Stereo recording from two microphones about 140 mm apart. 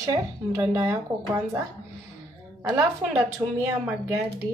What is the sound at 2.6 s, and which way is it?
A woman's voice, 20° right (ahead or behind).